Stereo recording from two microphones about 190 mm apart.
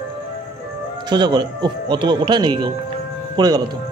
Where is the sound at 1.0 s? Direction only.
20° right (ahead or behind).